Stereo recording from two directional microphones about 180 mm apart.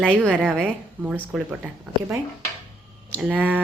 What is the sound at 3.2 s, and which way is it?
Speech, 10° right (ahead or behind).